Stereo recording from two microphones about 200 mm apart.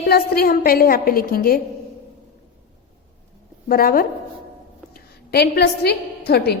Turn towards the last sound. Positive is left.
turn(degrees=55)  # may be behind; listen again after turning